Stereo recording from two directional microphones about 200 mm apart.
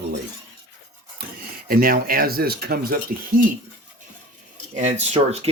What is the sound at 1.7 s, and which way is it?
Speech, 45° right (ahead or behind).